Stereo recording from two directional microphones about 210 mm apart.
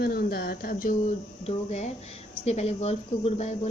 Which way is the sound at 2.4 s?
30° left (ahead or behind).